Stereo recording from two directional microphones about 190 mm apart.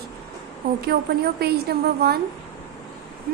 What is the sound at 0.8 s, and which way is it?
Speech, 55° right (ahead or behind).